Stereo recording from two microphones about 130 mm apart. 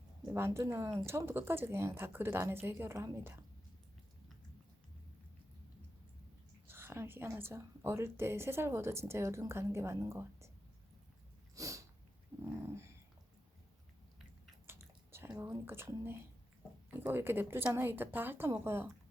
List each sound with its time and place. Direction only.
0.3 s a woman's voice: 20° right (ahead or behind)
6.7 s a woman's voice: 15° right (ahead or behind)
11.5 s sneeze: 25° right (ahead or behind)
12.5 s dog: 20° right (ahead or behind)
14.7 s biting: 15° right (ahead or behind)
15.4 s a woman's voice: 20° right (ahead or behind)